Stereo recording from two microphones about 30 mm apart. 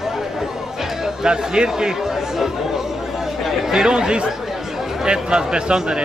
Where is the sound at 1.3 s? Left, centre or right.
Right.